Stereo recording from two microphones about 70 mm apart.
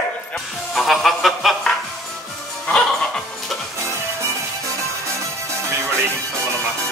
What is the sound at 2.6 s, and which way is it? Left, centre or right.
Music, centre.